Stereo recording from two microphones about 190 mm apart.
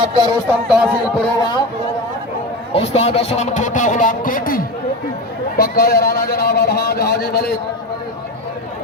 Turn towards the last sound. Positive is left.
turn(degrees=55)  # may be behind; listen again after turning